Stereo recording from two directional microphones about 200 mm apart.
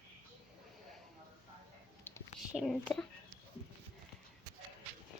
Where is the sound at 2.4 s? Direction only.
Centre (ahead or behind).